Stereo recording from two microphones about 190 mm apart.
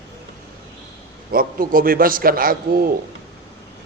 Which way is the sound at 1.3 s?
50° right (ahead or behind).